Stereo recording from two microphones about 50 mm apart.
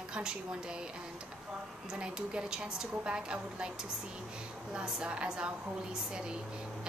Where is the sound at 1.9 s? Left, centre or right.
Centre.